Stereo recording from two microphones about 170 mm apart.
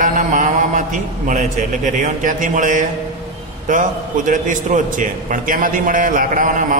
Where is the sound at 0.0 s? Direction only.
50° right (ahead or behind).